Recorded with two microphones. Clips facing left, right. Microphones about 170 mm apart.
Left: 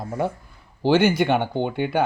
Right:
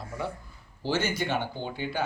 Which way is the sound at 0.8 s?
65° left (ahead or behind).